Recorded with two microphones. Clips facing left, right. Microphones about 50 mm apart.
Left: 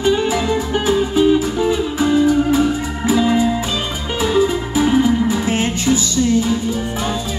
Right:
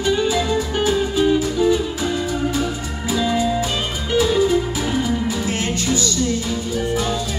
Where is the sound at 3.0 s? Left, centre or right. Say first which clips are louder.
Left 4 dB; left.